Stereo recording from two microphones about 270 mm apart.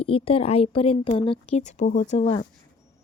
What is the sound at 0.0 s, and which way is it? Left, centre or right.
A woman's voice, centre.